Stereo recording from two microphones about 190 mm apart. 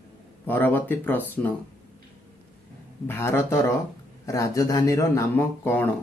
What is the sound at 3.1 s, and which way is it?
Speech, 10° left (ahead or behind).